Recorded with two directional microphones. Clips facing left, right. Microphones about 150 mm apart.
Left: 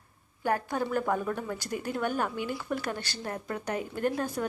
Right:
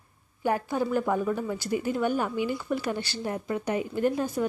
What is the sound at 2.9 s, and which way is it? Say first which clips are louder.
Speech: right 5 dB; 45° left (ahead or behind).